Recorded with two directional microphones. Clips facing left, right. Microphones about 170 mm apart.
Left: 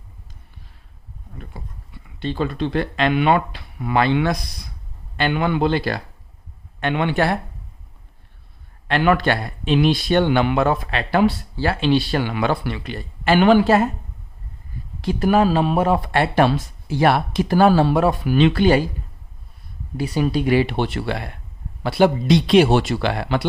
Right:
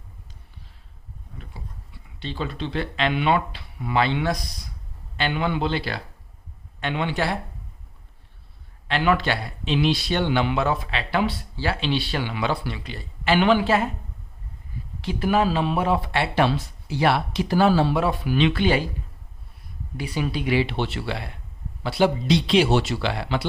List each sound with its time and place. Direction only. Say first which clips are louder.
1.4 s speech: left 4 dB; 50° left (ahead or behind)
8.9 s speech: left 4 dB; 50° left (ahead or behind)
15.0 s speech: left 5 dB; 45° left (ahead or behind)
20.0 s speech: left 6 dB; 40° left (ahead or behind)